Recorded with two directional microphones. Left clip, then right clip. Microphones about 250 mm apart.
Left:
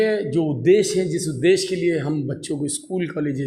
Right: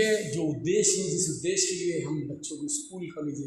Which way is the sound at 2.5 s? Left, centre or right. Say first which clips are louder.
Left 15 dB; left.